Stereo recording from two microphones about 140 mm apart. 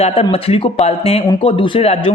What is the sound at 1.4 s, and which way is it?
Speech, 40° left (ahead or behind).